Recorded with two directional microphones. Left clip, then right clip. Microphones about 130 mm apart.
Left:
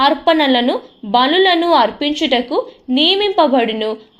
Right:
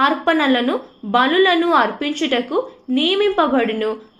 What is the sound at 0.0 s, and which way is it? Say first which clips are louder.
A woman's voice: left 4 dB; 30° left (ahead or behind).